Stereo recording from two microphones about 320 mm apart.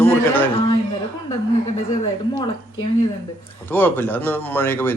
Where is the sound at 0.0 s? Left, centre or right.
Centre.